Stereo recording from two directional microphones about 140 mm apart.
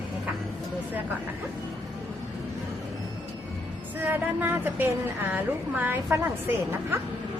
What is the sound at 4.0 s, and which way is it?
A woman's voice, 15° right (ahead or behind).